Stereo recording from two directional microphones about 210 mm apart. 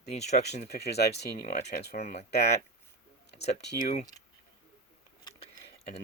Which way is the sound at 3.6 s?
50° left (ahead or behind).